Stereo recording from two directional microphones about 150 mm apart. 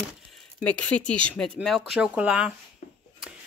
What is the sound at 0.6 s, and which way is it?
Speech, 10° left (ahead or behind).